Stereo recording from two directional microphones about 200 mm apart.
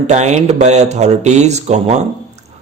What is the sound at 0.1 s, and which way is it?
A man's voice, 35° right (ahead or behind).